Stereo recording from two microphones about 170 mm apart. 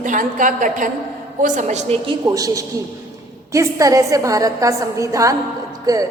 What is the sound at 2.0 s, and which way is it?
A woman's voice, 20° right (ahead or behind).